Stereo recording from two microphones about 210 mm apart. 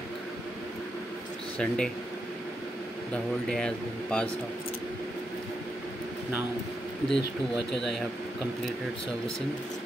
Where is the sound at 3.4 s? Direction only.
5° left (ahead or behind).